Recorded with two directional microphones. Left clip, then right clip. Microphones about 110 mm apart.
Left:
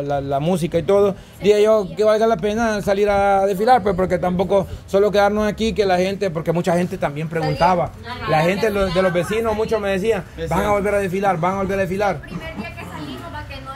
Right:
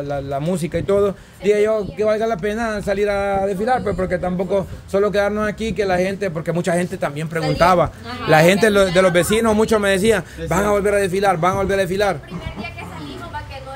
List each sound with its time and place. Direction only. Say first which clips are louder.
0.1 s speech: left 3 dB; 10° left (ahead or behind)
4.5 s speech: left 2 dB; 15° left (ahead or behind)
7.5 s speech: right 3 dB; 55° right (ahead or behind)
8.5 s speech: right 4 dB; 90° right; by 10.2 s 70° right (ahead or behind)
10.7 s a man's voice: right 2 dB; 25° right (ahead or behind)